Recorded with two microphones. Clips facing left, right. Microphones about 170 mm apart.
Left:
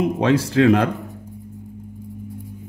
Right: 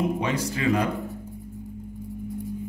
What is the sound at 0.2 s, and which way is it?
Speech, 90° left.